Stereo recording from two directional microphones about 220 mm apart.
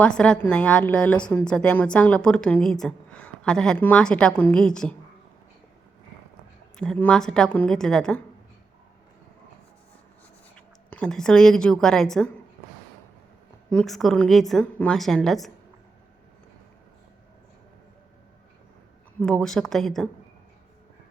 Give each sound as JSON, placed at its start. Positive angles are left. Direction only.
{"t": 0.0, "sound": "a woman's voice", "side_deg": 5}
{"t": 6.7, "sound": "a woman's voice", "side_deg": 5}
{"t": 10.8, "sound": "a woman's voice", "side_deg": 5}
{"t": 13.7, "sound": "a woman's voice", "side_deg": 0}
{"t": 19.2, "sound": "a woman's voice", "side_deg": 5}